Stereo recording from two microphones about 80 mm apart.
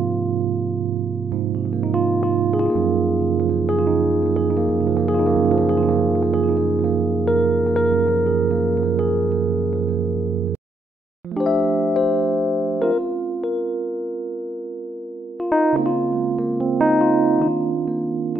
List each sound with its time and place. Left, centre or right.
0.0 s music: centre
1.9 s keyboard: centre
9.3 s music: centre
11.3 s keyboard: centre
15.5 s electric piano: centre